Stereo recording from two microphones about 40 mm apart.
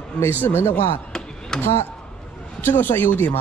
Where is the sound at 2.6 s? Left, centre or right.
Left.